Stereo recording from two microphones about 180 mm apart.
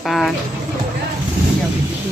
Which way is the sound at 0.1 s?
Centre (ahead or behind).